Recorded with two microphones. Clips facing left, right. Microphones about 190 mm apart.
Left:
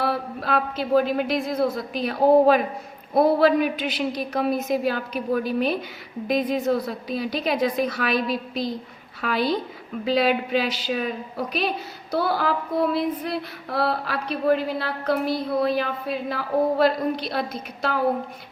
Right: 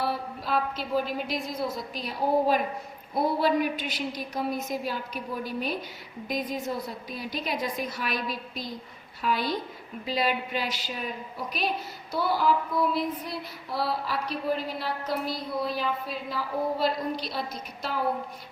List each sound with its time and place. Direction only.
0.0 s female singing: 65° left (ahead or behind)
3.2 s a woman's voice: 70° left (ahead or behind)
10.1 s a woman's voice: 85° left
12.1 s female singing: 70° left (ahead or behind)